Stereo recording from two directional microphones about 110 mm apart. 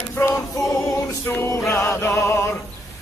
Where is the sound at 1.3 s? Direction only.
25° left (ahead or behind).